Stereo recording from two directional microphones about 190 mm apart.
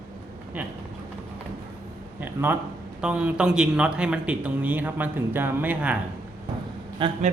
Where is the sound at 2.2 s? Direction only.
10° right (ahead or behind).